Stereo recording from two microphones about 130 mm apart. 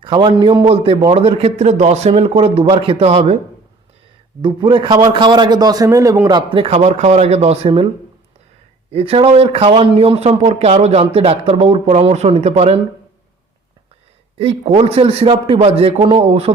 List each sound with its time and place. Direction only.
0.0 s a man's voice: 40° right (ahead or behind)
4.4 s a man's voice: 40° right (ahead or behind)
6.7 s speech: 60° right (ahead or behind)
8.9 s a man's voice: 45° right (ahead or behind)
14.3 s a man's voice: 50° right (ahead or behind)